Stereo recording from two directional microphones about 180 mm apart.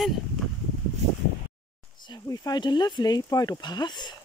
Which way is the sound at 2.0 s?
20° left (ahead or behind).